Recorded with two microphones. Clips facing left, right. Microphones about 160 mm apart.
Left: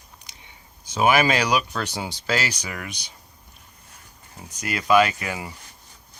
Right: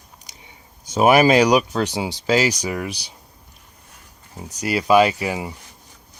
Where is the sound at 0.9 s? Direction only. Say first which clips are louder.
Right 5 dB; 40° right (ahead or behind).